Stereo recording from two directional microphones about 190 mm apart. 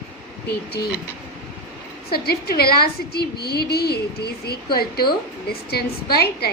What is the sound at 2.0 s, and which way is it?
A woman's voice, 55° left (ahead or behind).